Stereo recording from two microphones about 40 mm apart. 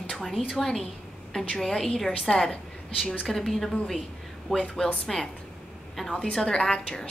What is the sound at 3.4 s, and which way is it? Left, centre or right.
A woman's voice, centre.